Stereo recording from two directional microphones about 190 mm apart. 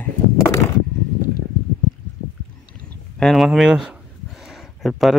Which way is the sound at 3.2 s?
Centre (ahead or behind).